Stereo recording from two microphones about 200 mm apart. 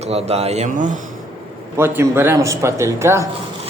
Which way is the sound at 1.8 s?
10° right (ahead or behind).